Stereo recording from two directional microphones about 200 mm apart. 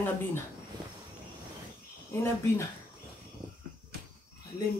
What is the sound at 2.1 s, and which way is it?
Speech, 15° left (ahead or behind).